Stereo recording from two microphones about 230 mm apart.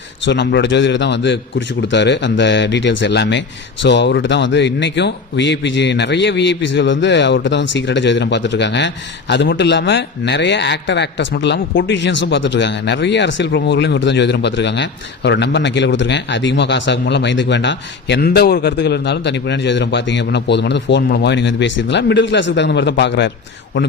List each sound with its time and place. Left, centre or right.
0.3 s speech: left